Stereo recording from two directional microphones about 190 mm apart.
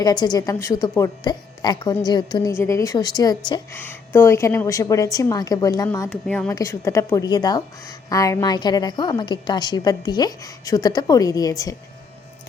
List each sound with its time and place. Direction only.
0.0 s a woman's voice: 20° left (ahead or behind)
6.1 s a woman's voice: 5° left (ahead or behind)
6.5 s a woman's voice: 15° left (ahead or behind)